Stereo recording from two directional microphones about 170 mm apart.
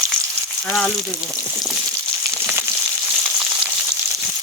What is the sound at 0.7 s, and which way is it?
Frying, 5° left (ahead or behind).